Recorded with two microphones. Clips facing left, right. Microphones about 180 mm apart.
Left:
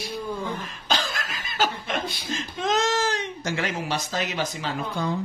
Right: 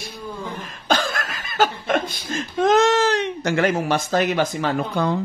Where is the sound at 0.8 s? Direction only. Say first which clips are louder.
Right 6 dB; 50° right (ahead or behind).